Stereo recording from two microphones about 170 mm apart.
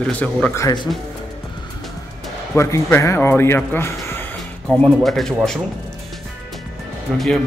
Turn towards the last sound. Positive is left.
turn(degrees=0)  # may be behind; listen again after turning